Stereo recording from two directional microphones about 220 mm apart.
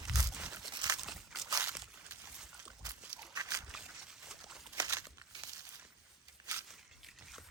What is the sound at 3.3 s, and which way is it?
Walk, 15° right (ahead or behind).